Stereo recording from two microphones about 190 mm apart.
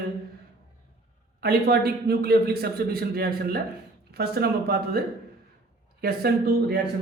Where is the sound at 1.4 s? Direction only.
55° right (ahead or behind).